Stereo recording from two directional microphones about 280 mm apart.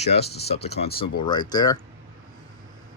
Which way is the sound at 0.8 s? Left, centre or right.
Centre.